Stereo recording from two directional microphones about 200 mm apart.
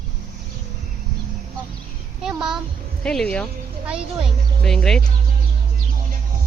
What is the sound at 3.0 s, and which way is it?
Music, 5° left (ahead or behind).